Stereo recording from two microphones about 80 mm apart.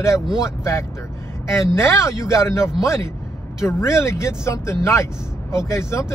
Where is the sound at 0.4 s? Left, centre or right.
Left.